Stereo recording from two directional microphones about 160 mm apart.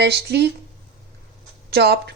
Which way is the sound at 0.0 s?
90° right.